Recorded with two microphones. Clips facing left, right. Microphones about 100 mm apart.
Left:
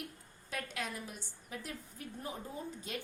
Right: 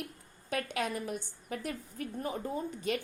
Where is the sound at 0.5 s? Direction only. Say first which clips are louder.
Right 7 dB; 65° right (ahead or behind).